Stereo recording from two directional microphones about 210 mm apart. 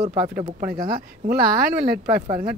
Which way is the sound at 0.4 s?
40° right (ahead or behind).